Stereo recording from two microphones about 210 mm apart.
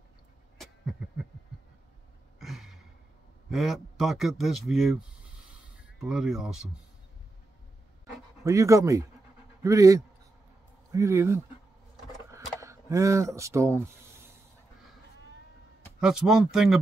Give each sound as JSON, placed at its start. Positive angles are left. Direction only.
{"t": 2.3, "sound": "a sound", "side_deg": 0}
{"t": 3.4, "sound": "speech", "side_deg": 0}
{"t": 5.9, "sound": "speech", "side_deg": 0}
{"t": 8.5, "sound": "speech", "side_deg": -15}
{"t": 12.5, "sound": "speech", "side_deg": -15}
{"t": 16.0, "sound": "speech", "side_deg": -5}